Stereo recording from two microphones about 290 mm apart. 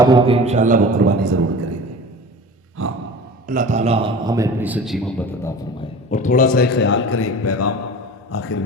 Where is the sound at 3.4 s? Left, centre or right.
Right; by 5.9 s centre.